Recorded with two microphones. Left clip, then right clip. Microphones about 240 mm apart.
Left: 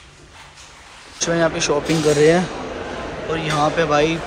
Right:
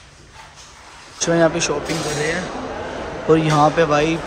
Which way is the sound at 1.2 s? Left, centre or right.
Centre.